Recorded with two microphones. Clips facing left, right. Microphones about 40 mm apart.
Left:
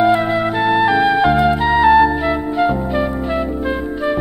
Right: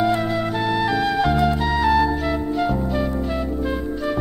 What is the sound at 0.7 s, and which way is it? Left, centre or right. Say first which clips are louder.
Music: left 8 dB; left.